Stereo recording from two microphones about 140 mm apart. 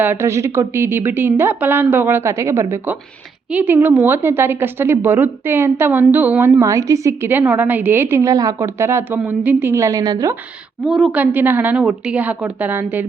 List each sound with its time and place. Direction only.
0.0 s a woman's voice: 15° right (ahead or behind)
6.6 s a woman's voice: 20° right (ahead or behind)
10.8 s a woman's voice: centre (ahead or behind)
11.2 s a woman's voice: 15° right (ahead or behind)